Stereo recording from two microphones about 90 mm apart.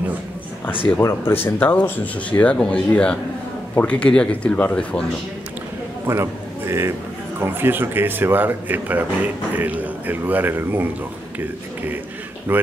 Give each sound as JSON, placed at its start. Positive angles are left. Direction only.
{"t": 1.0, "sound": "speech", "side_deg": 25}
{"t": 6.0, "sound": "a sound", "side_deg": -30}
{"t": 7.3, "sound": "speech", "side_deg": -25}
{"t": 12.5, "sound": "speech", "side_deg": -20}